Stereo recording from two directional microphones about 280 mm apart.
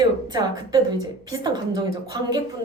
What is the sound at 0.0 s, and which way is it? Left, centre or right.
A woman's voice, centre.